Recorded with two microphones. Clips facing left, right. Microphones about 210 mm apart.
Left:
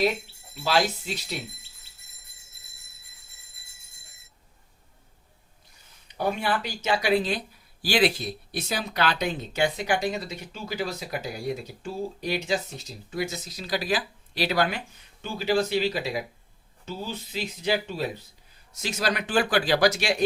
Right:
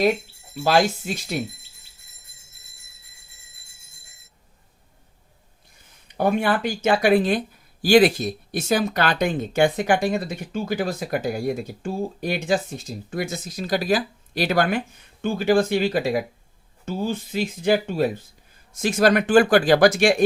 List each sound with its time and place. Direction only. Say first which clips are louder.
0.5 s speech: right 5 dB; 50° right (ahead or behind)
6.1 s speech: right 6 dB; 55° right (ahead or behind)